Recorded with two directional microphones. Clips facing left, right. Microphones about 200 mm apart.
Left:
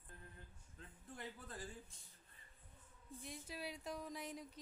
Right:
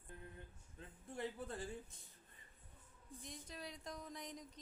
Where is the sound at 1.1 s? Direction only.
25° right (ahead or behind).